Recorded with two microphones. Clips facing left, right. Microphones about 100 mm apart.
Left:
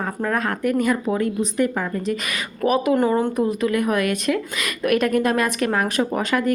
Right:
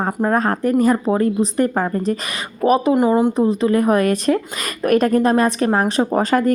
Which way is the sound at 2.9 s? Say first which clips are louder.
Right 4 dB; 15° right (ahead or behind).